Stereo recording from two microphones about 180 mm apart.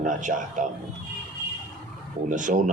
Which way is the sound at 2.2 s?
45° right (ahead or behind).